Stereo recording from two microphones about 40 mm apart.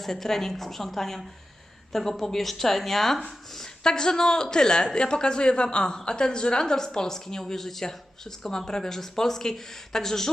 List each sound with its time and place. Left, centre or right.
0.0 s speech: centre
3.6 s speech: centre